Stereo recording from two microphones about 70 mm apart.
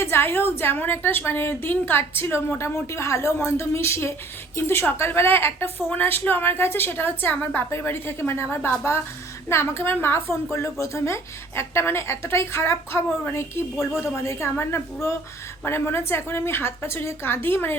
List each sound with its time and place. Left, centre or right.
0.0 s a woman's voice: left